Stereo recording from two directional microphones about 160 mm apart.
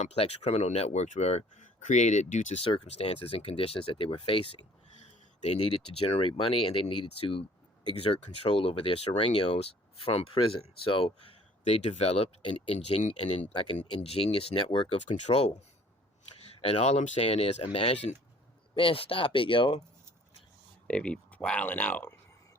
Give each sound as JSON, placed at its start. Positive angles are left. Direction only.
{"t": 0.0, "sound": "speech", "side_deg": 40}
{"t": 16.6, "sound": "speech", "side_deg": 35}
{"t": 20.8, "sound": "speech", "side_deg": 5}